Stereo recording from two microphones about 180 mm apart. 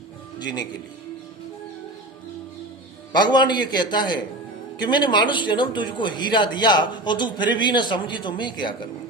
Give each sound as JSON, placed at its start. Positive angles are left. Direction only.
{"t": 0.3, "sound": "speech", "side_deg": 25}
{"t": 3.1, "sound": "speech", "side_deg": 25}